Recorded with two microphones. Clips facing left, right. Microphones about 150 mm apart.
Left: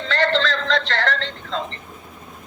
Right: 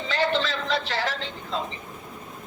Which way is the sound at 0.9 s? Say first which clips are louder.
Left 5 dB; 10° right (ahead or behind).